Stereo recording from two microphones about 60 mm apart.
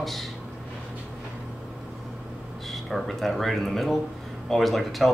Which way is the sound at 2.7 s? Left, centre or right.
Centre.